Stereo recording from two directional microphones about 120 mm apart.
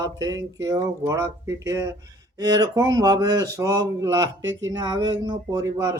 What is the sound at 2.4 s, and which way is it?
Speech, 30° right (ahead or behind).